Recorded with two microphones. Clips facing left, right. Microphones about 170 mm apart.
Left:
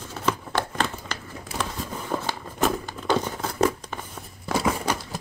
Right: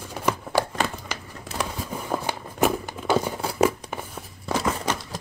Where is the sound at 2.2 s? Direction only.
10° right (ahead or behind).